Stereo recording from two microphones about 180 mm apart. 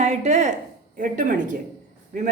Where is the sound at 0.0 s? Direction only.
40° right (ahead or behind).